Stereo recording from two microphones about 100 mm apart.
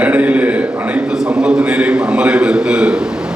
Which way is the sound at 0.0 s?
15° right (ahead or behind).